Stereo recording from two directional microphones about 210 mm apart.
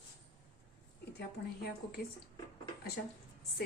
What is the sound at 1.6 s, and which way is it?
Speech, 50° left (ahead or behind).